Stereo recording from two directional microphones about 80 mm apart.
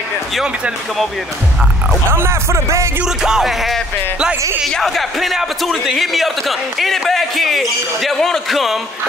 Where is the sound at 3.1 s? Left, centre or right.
Centre.